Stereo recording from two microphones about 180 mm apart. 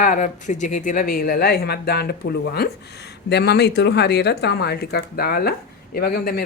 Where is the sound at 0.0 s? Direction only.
45° left (ahead or behind).